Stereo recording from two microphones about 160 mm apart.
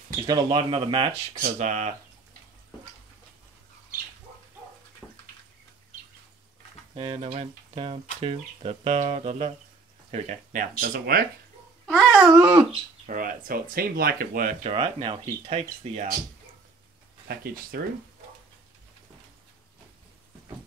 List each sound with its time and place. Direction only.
0.3 s speech: 35° right (ahead or behind)
1.4 s speech: 50° right (ahead or behind)
5.0 s bathtub: centre (ahead or behind)
7.0 s speech: 35° right (ahead or behind); by 11.2 s 65° right (ahead or behind)
11.9 s babbling: 5° left (ahead or behind)
12.4 s dog: 10° right (ahead or behind)
13.0 s speech: 60° right (ahead or behind)
14.7 s speech: 30° right (ahead or behind)
15.5 s speech: 40° right (ahead or behind)
17.3 s speech: 70° right (ahead or behind)